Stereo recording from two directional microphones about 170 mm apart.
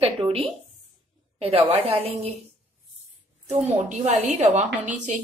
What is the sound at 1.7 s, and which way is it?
Speech, 35° right (ahead or behind).